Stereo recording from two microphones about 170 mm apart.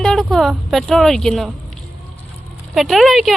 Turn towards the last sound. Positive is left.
turn(degrees=0)  # may be behind; listen again after turning